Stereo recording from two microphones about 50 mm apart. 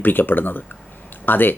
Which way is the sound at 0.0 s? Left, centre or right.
Left.